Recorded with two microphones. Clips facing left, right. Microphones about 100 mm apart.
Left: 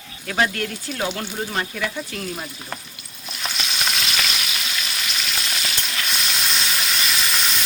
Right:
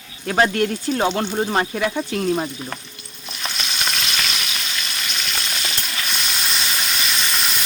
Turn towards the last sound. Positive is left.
turn(degrees=0)  # may be behind; listen again after turning